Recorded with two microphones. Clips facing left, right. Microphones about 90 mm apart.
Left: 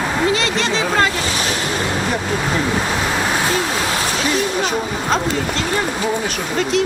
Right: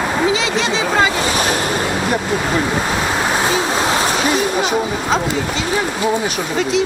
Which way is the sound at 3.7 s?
25° right (ahead or behind).